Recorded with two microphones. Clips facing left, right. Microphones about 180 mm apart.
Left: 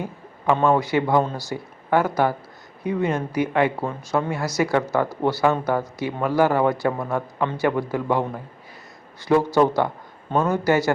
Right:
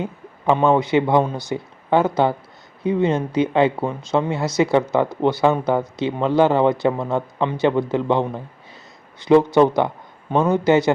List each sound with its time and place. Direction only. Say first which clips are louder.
0.0 s a man's voice: right 3 dB; 20° right (ahead or behind)